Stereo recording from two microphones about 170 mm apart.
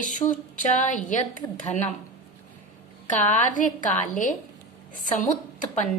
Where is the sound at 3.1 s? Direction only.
45° left (ahead or behind).